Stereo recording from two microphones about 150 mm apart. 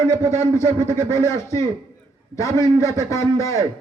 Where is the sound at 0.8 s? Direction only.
25° right (ahead or behind).